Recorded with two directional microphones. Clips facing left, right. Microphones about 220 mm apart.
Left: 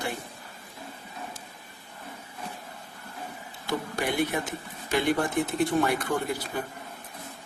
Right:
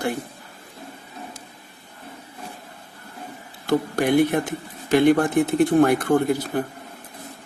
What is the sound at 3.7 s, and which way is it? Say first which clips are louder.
Speech: right 10 dB; 55° right (ahead or behind).